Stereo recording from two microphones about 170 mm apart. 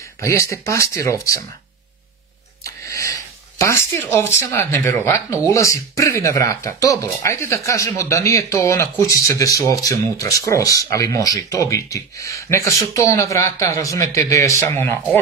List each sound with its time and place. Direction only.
0.2 s speech: 15° left (ahead or behind)
2.6 s a sound: 20° left (ahead or behind)
4.4 s speech: 15° left (ahead or behind)